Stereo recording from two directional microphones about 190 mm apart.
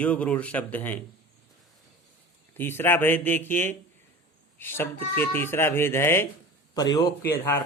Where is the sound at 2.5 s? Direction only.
10° left (ahead or behind).